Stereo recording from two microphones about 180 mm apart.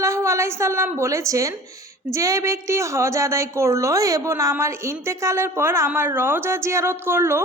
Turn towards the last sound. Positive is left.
turn(degrees=-15)  # may be behind; listen again after turning